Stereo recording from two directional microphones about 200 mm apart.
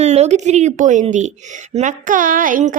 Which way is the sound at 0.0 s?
35° right (ahead or behind).